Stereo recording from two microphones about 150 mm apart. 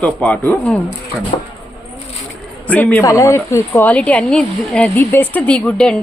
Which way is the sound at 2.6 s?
10° left (ahead or behind).